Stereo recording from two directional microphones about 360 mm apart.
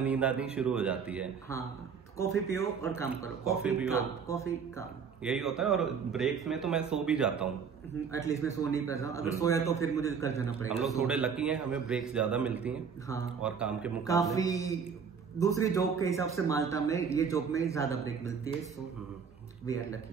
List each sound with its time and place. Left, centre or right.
0.0 s speech: centre
2.4 s a man's voice: centre
3.6 s speech: centre
3.9 s a man's voice: centre
8.1 s a man's voice: centre
14.0 s a man's voice: centre